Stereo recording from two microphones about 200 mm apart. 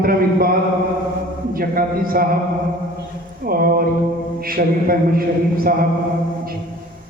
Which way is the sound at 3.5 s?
50° right (ahead or behind).